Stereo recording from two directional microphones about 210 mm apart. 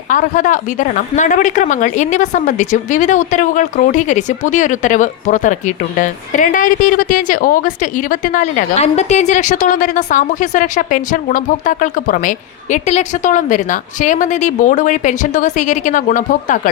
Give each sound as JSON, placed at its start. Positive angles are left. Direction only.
{"t": 0.1, "sound": "a woman's voice", "side_deg": 40}